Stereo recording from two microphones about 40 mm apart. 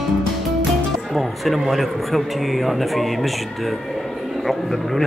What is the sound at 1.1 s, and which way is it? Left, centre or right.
A man's voice, centre.